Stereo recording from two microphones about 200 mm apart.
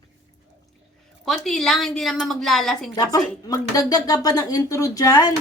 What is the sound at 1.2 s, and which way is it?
A woman's voice, centre (ahead or behind).